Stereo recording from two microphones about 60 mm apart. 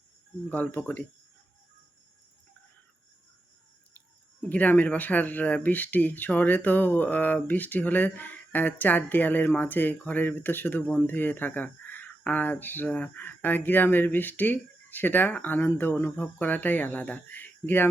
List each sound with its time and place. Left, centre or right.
0.5 s speech: left
3.9 s speech: left
16.1 s speech: left